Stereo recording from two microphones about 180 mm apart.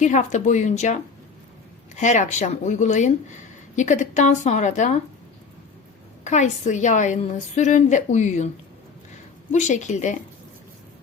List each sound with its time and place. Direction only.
0.0 s a woman's voice: 40° left (ahead or behind)
2.0 s a woman's voice: 40° left (ahead or behind)
6.2 s a woman's voice: 40° left (ahead or behind)
9.5 s a woman's voice: 40° left (ahead or behind)